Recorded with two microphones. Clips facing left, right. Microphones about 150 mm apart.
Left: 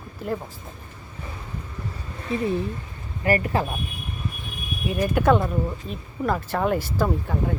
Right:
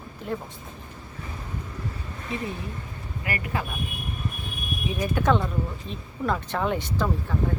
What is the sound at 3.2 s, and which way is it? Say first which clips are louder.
Speech: left 8 dB; 35° left (ahead or behind).